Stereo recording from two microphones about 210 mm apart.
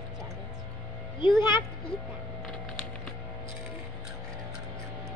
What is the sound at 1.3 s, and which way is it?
Speech, 15° right (ahead or behind).